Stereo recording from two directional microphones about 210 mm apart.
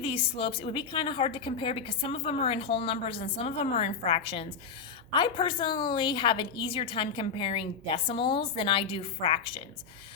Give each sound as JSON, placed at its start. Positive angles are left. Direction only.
{"t": 0.0, "sound": "a woman's voice", "side_deg": 25}